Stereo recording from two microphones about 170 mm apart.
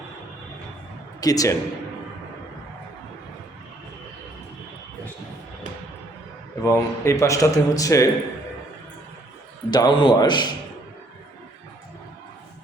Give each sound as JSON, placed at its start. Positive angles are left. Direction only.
{"t": 1.2, "sound": "a man's voice", "side_deg": 20}
{"t": 6.6, "sound": "a man's voice", "side_deg": 15}
{"t": 9.6, "sound": "a man's voice", "side_deg": 25}